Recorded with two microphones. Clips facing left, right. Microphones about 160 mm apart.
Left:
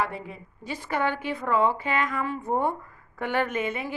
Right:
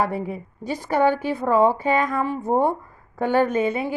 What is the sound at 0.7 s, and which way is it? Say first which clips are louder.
A woman's voice: right 8 dB; 40° right (ahead or behind).